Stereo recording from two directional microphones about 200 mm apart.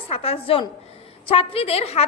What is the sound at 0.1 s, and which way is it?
A woman's voice, 30° left (ahead or behind).